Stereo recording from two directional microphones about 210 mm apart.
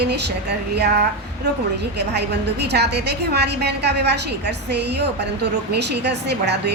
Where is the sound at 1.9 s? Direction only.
50° right (ahead or behind).